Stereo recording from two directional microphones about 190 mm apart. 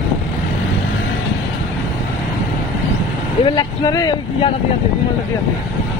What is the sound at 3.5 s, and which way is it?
Speech, 20° left (ahead or behind).